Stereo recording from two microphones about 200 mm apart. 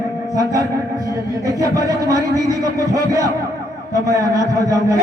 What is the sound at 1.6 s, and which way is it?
A man's voice, 15° right (ahead or behind).